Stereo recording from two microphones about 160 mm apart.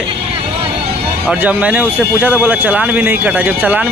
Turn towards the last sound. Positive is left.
turn(degrees=-10)  # may be behind; listen again after turning